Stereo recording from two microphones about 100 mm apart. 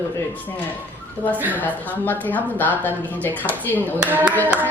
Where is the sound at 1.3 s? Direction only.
20° right (ahead or behind).